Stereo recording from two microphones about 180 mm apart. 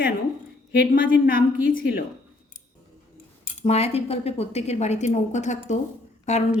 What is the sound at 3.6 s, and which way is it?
A woman's voice, 35° left (ahead or behind).